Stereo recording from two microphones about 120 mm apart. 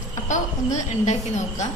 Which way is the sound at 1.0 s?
70° left (ahead or behind).